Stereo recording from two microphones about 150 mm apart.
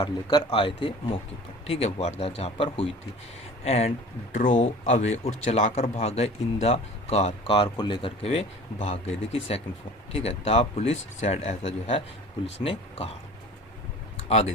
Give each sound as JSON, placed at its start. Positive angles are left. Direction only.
{"t": 0.0, "sound": "speech", "side_deg": 30}